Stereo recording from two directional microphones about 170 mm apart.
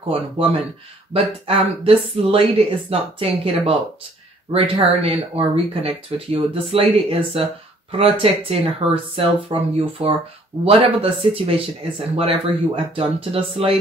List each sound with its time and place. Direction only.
0.1 s speech: 35° right (ahead or behind)
8.5 s speech: 35° right (ahead or behind)